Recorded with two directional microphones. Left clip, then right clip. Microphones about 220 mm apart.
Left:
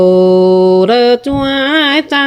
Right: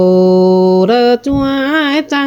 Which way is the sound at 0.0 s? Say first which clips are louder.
Left 2 dB; 10° left (ahead or behind).